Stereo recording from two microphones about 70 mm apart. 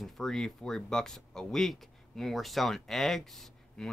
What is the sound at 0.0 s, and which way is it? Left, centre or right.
Speech, centre.